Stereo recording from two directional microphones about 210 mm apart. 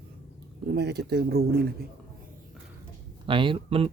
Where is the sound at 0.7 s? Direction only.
50° right (ahead or behind).